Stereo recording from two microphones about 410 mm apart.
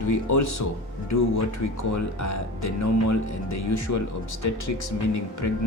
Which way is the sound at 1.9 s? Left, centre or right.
Left.